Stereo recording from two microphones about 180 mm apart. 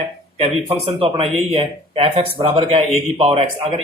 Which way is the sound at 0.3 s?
30° right (ahead or behind).